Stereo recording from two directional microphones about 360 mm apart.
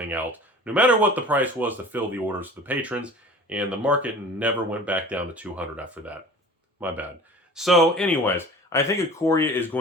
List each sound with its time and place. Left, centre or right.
0.0 s speech: centre